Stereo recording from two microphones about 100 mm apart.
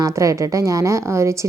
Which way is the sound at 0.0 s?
30° right (ahead or behind).